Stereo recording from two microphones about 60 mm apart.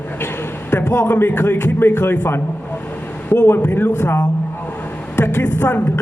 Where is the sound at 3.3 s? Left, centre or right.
Left.